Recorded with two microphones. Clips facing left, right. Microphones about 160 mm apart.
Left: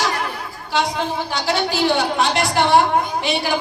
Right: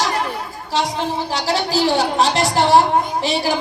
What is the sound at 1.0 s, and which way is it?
A woman's voice, 35° right (ahead or behind).